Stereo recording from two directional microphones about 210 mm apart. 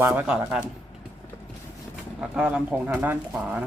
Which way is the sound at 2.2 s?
5° right (ahead or behind).